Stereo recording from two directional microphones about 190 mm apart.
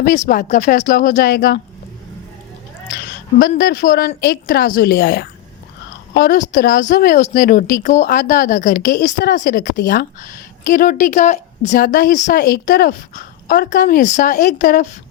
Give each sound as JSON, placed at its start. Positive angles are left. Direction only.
{"t": 0.0, "sound": "speech", "side_deg": 45}
{"t": 3.0, "sound": "a sound", "side_deg": 55}
{"t": 3.6, "sound": "a woman's voice", "side_deg": 50}
{"t": 9.7, "sound": "speech", "side_deg": 60}